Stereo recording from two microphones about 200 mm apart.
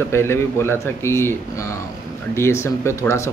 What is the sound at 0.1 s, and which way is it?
A man's voice, 10° left (ahead or behind).